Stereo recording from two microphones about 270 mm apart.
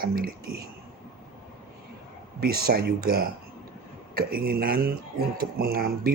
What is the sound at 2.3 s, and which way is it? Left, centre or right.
Speech, right.